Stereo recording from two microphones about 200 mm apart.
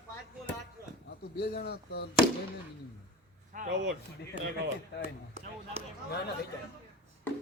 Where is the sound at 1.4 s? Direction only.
55° left (ahead or behind).